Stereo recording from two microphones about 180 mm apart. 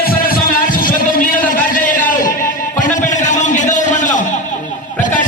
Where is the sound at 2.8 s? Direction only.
45° left (ahead or behind).